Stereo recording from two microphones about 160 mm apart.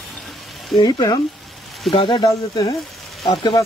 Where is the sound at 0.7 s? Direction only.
25° left (ahead or behind).